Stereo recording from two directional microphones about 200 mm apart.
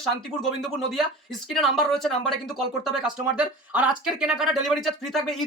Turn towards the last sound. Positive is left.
turn(degrees=0)  # may be behind; listen again after turning